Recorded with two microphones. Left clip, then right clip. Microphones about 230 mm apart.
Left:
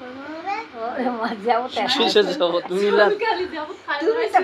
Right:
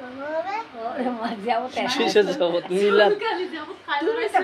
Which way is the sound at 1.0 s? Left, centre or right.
Centre.